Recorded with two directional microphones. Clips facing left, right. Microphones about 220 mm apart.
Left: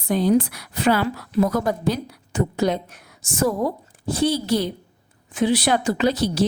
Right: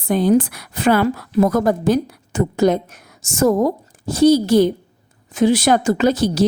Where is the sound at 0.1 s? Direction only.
50° right (ahead or behind).